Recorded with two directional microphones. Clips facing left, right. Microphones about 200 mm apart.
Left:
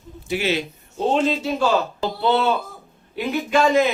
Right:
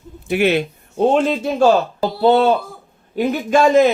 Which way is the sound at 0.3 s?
60° right (ahead or behind).